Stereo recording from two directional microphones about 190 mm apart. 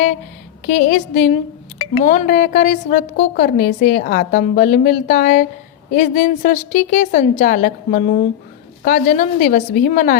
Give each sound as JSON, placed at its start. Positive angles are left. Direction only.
{"t": 0.6, "sound": "a woman's voice", "side_deg": 40}